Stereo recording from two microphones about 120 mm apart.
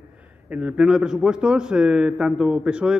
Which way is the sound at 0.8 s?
5° right (ahead or behind).